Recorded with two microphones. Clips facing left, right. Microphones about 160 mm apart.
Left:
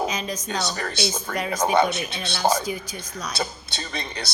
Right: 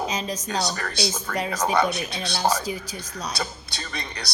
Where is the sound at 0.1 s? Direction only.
30° right (ahead or behind).